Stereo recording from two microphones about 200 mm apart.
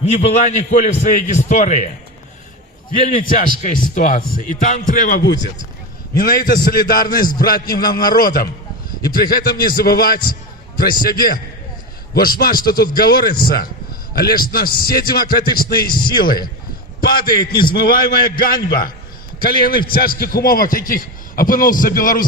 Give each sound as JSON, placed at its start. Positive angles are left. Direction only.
{"t": 0.1, "sound": "a man's voice", "side_deg": 35}
{"t": 3.1, "sound": "a man's voice", "side_deg": 45}